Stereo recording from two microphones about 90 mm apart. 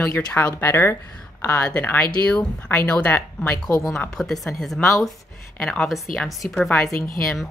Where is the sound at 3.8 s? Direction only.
10° left (ahead or behind).